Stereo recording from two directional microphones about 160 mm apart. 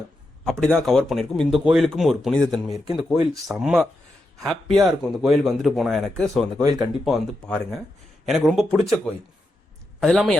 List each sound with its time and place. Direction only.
0.6 s speech: 5° left (ahead or behind)
6.6 s speech: 25° right (ahead or behind)
7.0 s speech: centre (ahead or behind)
10.0 s speech: centre (ahead or behind)